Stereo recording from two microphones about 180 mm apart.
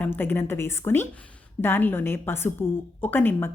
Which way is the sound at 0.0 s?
10° left (ahead or behind).